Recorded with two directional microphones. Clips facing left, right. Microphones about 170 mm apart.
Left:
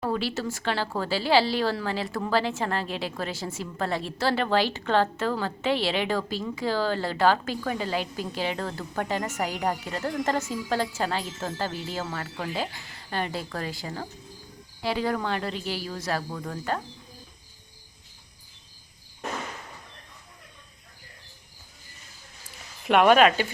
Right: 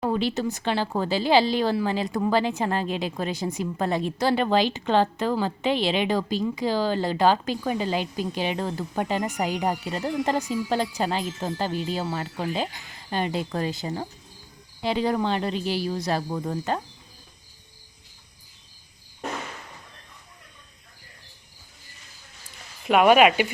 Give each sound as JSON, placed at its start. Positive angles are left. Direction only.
{"t": 0.0, "sound": "speech", "side_deg": -20}
{"t": 22.8, "sound": "speech", "side_deg": 0}